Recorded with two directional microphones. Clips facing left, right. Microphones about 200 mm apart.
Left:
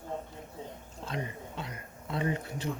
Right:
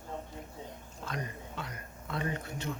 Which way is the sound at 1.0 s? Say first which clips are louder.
Left 2 dB; 25° left (ahead or behind).